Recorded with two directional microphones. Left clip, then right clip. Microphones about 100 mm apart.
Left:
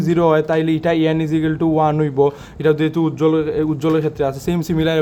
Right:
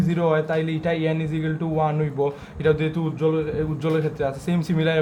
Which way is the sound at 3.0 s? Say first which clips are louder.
Left 7 dB; 70° left (ahead or behind).